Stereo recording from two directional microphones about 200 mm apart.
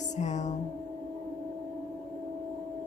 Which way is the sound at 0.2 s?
35° left (ahead or behind).